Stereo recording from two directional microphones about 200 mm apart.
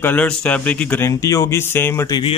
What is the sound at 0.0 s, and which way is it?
Speech, 10° left (ahead or behind).